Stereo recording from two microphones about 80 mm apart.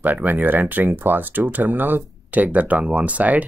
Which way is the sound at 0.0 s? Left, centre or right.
Right.